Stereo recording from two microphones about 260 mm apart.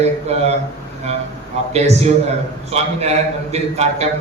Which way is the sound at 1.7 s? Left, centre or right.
Right.